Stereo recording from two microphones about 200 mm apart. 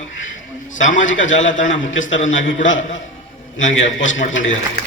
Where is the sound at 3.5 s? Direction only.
75° left (ahead or behind).